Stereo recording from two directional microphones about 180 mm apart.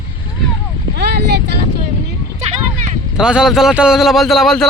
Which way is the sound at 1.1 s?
70° right (ahead or behind).